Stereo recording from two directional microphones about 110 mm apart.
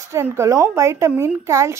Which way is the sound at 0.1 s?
25° right (ahead or behind).